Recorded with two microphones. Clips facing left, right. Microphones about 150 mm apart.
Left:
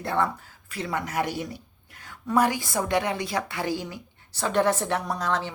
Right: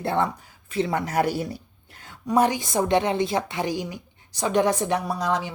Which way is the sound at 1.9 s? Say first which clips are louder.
Right 1 dB; 25° right (ahead or behind).